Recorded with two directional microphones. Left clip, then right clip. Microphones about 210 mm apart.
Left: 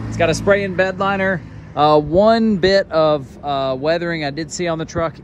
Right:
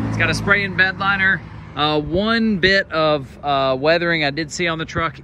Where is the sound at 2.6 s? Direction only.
25° left (ahead or behind).